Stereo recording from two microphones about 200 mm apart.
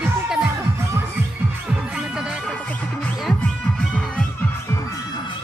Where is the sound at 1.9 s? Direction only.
5° right (ahead or behind); by 5.3 s 15° left (ahead or behind).